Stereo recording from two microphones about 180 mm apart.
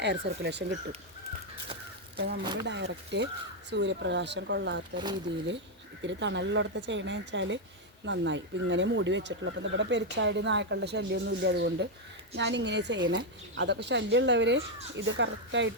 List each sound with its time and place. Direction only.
0.0 s speech: 70° right (ahead or behind)
2.1 s speech: 65° right (ahead or behind)
6.0 s speech: 90° right
14.9 s speech: 90° right